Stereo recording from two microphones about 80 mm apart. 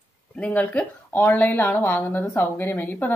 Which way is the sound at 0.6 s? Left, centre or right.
Centre.